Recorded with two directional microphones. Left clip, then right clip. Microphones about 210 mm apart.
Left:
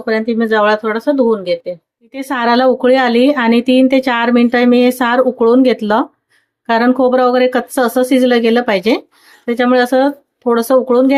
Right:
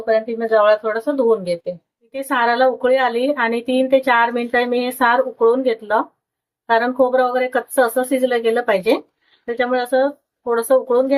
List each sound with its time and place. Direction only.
0.0 s speech: 30° left (ahead or behind)
2.1 s a woman's voice: 40° left (ahead or behind)